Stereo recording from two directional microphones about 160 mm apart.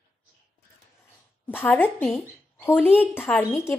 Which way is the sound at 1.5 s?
10° left (ahead or behind).